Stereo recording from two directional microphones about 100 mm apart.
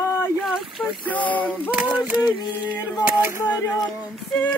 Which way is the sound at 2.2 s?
50° left (ahead or behind).